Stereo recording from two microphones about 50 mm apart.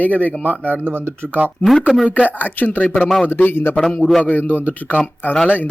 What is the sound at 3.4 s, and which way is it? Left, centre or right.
Speech, left.